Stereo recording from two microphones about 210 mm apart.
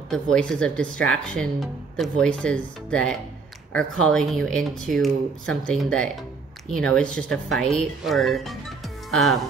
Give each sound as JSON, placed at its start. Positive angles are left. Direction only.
{"t": 0.1, "sound": "speech", "side_deg": 5}